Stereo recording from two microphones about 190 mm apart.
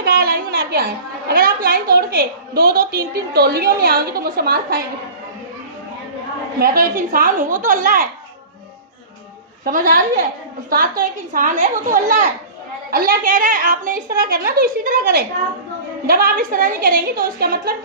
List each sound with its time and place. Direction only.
0.0 s a sound: 55° right (ahead or behind)
1.3 s a woman's voice: 50° right (ahead or behind)
6.6 s a woman's voice: 50° right (ahead or behind)
9.6 s a woman's voice: 50° right (ahead or behind)